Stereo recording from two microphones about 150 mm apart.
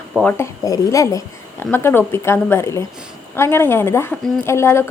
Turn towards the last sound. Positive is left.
turn(degrees=15)  # may be behind; listen again after turning